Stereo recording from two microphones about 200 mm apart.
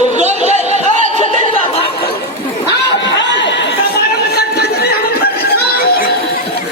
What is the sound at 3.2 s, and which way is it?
Chatter, 65° left (ahead or behind).